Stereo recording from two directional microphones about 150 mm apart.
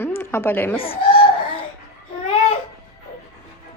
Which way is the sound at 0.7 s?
40° left (ahead or behind).